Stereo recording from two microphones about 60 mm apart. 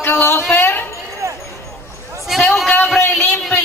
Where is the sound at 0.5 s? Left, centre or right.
Left.